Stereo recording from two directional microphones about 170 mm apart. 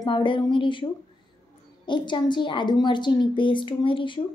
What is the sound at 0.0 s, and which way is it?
Speech, 30° left (ahead or behind).